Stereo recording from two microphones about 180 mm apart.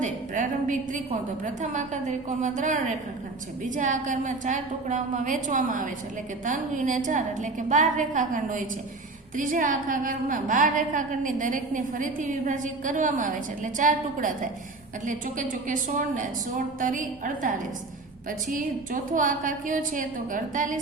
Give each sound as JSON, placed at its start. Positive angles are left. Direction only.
{"t": 0.0, "sound": "a woman's voice", "side_deg": -45}
{"t": 18.5, "sound": "a woman's voice", "side_deg": -50}